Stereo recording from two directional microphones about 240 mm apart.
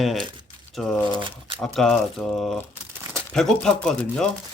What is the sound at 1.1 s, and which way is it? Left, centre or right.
Speech, right.